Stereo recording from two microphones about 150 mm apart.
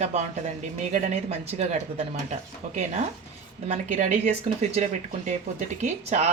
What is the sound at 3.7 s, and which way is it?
Speech, 50° right (ahead or behind).